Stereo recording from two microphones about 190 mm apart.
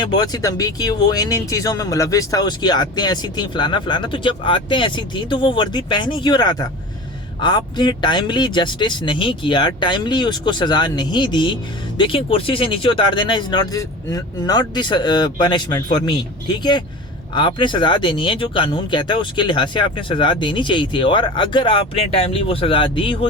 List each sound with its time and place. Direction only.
0.0 s speech: 25° left (ahead or behind)